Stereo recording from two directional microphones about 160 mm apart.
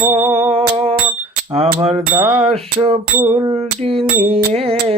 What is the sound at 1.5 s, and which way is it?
Mantra, 40° right (ahead or behind).